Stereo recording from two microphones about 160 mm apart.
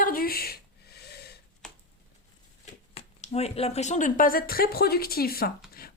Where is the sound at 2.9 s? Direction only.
40° left (ahead or behind).